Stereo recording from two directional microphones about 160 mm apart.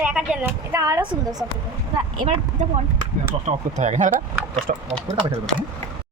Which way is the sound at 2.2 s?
35° right (ahead or behind).